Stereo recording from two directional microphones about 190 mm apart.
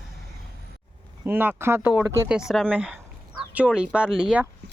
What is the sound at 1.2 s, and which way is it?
Speech, 10° right (ahead or behind).